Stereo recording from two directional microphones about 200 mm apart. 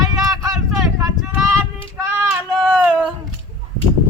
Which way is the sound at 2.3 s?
5° right (ahead or behind).